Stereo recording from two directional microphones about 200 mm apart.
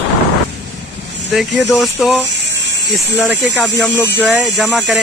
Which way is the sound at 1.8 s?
Centre (ahead or behind).